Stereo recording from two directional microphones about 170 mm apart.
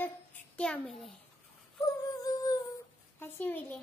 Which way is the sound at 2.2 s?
20° left (ahead or behind).